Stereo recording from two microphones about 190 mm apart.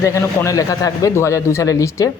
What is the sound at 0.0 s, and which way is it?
Speech, 15° left (ahead or behind).